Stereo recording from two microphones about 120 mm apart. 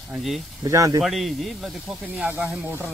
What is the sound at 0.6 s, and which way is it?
Speech, 30° right (ahead or behind).